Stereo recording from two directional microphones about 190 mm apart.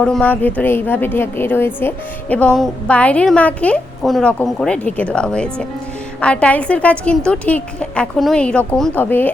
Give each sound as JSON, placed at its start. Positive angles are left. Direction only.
{"t": 0.0, "sound": "a woman's voice", "side_deg": 5}